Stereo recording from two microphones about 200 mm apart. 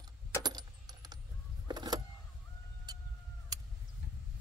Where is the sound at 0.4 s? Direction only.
20° right (ahead or behind).